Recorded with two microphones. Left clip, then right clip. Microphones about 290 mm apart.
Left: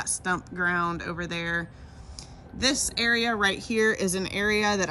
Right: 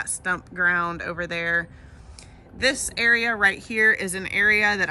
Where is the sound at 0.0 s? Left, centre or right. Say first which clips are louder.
Right 2 dB; centre.